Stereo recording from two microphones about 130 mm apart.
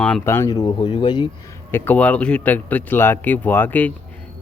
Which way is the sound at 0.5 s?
40° left (ahead or behind).